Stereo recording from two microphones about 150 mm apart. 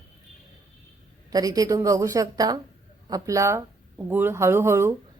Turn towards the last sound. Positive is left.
turn(degrees=-15)  # may be behind; listen again after turning